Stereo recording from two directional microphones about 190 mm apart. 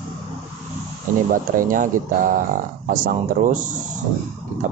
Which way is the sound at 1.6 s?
45° right (ahead or behind).